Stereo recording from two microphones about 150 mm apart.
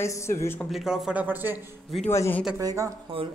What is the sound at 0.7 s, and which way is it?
Speech, centre (ahead or behind).